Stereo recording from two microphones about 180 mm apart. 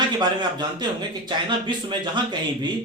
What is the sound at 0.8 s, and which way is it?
Speech, 25° right (ahead or behind).